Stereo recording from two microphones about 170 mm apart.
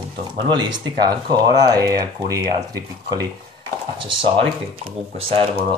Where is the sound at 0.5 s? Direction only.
25° right (ahead or behind).